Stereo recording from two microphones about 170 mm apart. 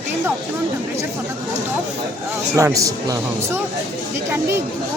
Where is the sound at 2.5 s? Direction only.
20° right (ahead or behind).